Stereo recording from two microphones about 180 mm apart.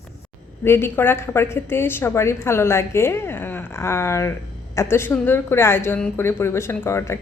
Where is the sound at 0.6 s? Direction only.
15° left (ahead or behind).